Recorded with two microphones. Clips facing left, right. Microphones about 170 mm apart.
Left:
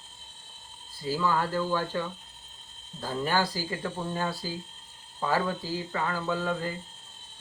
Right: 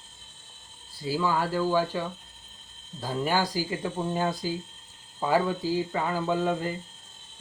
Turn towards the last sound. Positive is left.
turn(degrees=-20)  # may be behind; listen again after turning